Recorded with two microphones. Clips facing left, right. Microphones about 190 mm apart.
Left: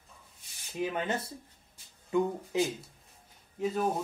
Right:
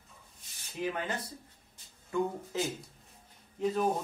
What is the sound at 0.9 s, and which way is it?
Speech, 25° left (ahead or behind).